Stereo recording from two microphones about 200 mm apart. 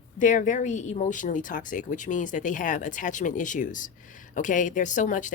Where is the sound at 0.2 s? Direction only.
40° left (ahead or behind).